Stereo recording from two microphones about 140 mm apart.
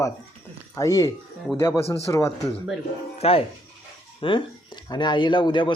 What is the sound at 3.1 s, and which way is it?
Speech, 45° left (ahead or behind).